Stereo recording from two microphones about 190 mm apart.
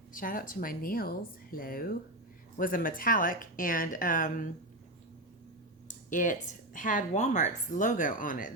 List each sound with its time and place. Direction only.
0.1 s speech: 45° left (ahead or behind)
6.1 s speech: 45° left (ahead or behind)